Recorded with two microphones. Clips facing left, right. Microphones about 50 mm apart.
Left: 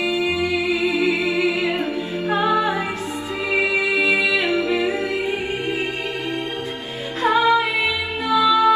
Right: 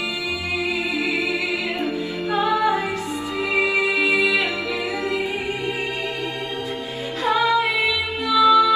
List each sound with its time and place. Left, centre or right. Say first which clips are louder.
0.7 s music: left 3 dB; left
7.2 s music: left 2 dB; left